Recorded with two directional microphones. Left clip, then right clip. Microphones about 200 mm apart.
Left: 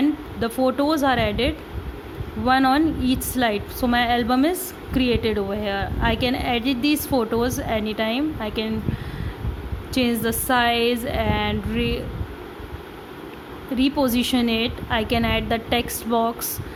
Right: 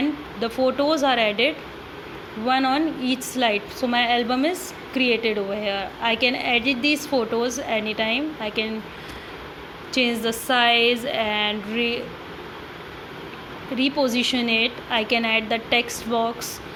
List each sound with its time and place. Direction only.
0.3 s a woman's voice: 35° left (ahead or behind)
9.9 s a woman's voice: 35° left (ahead or behind)
13.7 s a woman's voice: 35° left (ahead or behind)